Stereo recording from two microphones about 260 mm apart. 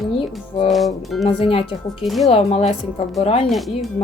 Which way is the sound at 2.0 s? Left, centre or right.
Centre.